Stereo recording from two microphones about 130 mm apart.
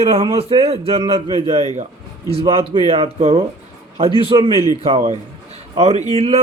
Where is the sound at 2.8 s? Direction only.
50° right (ahead or behind).